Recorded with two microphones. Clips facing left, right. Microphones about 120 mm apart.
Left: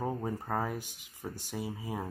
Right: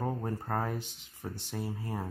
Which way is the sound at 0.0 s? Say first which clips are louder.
Even; 5° left (ahead or behind).